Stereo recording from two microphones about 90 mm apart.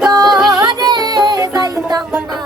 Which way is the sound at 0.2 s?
Centre (ahead or behind).